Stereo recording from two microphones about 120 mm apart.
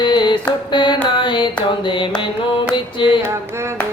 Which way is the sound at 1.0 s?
40° left (ahead or behind).